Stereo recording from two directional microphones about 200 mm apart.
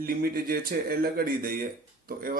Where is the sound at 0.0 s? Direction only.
45° right (ahead or behind).